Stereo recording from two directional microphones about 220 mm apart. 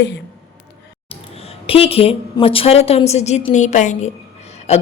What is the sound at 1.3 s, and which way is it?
A woman's voice, 25° left (ahead or behind).